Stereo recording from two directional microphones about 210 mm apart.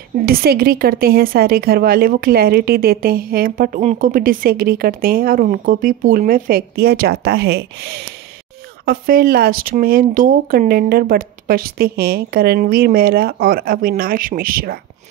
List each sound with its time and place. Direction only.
0.2 s speech: 45° right (ahead or behind)